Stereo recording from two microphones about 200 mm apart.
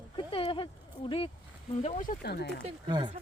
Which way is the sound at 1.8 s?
35° left (ahead or behind).